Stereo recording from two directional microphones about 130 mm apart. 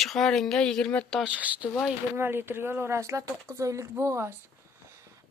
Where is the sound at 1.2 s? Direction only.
10° right (ahead or behind).